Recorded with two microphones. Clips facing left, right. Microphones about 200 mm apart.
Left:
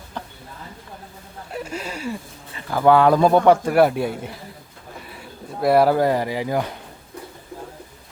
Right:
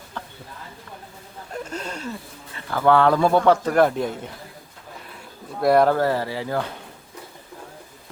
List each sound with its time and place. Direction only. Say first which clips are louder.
0.2 s a sound: left 3 dB; 15° left (ahead or behind)
1.5 s speech: left 1 dB; 10° left (ahead or behind)
5.1 s speech: left 1 dB; 5° left (ahead or behind)